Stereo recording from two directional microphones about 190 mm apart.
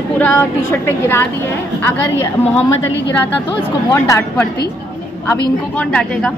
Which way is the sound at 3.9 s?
15° left (ahead or behind).